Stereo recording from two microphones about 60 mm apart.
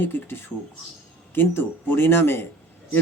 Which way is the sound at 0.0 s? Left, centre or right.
Left.